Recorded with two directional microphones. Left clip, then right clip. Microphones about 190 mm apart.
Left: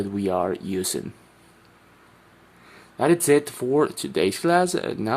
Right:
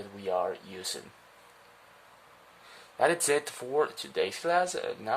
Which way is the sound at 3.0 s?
10° left (ahead or behind).